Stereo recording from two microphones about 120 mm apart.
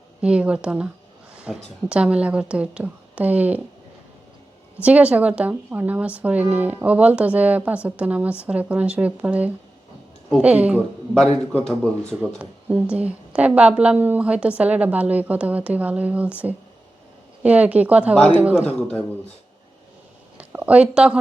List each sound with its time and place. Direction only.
0.2 s a woman's voice: 10° right (ahead or behind)
4.8 s a woman's voice: 10° right (ahead or behind)
11.3 s a man's voice: 60° left (ahead or behind)
12.4 s a woman's voice: 10° right (ahead or behind)
18.8 s speech: 5° left (ahead or behind)
20.4 s speech: 10° right (ahead or behind)